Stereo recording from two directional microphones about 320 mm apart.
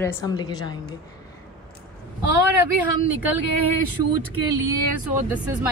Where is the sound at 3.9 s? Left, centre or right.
Right.